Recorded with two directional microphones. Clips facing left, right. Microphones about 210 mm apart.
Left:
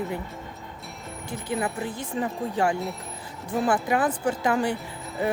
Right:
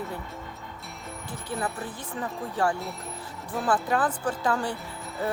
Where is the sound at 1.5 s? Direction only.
15° left (ahead or behind).